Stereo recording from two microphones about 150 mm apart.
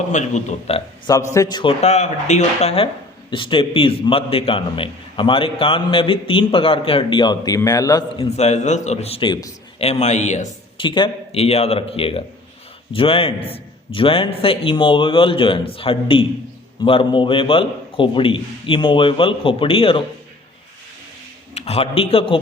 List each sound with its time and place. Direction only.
0.1 s a man's voice: 50° left (ahead or behind)
1.0 s a man's voice: 20° left (ahead or behind)
1.8 s speech: 50° left (ahead or behind); by 8.2 s 25° left (ahead or behind)
8.2 s a man's voice: 45° left (ahead or behind); by 9.8 s 30° left (ahead or behind)
9.8 s a man's voice: 45° left (ahead or behind)
10.8 s speech: 35° left (ahead or behind)
21.5 s a man's voice: 45° left (ahead or behind)